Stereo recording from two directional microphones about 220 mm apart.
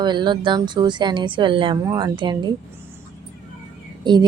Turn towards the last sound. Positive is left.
turn(degrees=-20)  # may be behind; listen again after turning